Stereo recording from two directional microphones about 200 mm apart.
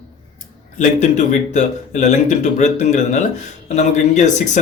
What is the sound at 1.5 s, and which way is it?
Speech, 35° left (ahead or behind).